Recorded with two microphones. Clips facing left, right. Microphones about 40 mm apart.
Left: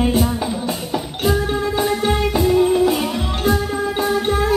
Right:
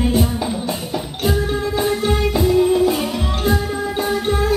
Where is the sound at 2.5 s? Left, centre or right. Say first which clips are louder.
Even; left.